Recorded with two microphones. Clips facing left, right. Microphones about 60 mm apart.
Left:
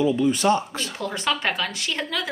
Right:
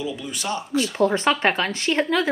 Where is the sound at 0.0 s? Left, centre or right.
Left.